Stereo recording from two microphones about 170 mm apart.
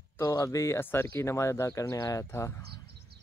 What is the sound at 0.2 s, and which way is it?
Speech, 20° left (ahead or behind).